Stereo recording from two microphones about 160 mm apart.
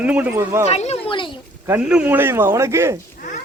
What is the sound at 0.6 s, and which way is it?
Speech, 40° left (ahead or behind).